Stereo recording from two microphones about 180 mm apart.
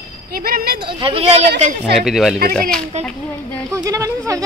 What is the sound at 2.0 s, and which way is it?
Speech, centre (ahead or behind).